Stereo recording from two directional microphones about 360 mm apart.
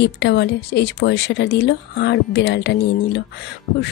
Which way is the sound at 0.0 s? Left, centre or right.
Left.